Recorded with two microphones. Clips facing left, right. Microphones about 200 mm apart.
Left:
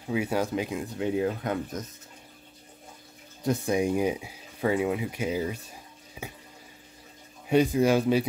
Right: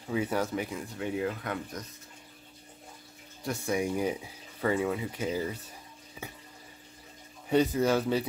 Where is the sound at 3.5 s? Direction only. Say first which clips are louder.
Left 5 dB; 20° left (ahead or behind).